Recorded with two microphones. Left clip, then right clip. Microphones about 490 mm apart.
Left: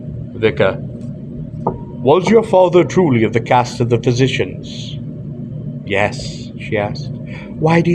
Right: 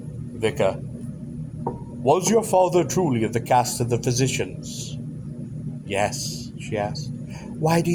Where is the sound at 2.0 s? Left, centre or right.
Right.